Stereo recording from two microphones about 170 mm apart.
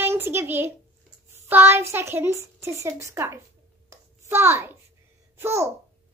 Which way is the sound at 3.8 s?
15° right (ahead or behind).